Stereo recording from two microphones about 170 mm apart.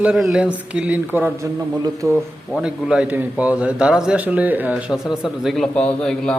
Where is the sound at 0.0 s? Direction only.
5° right (ahead or behind).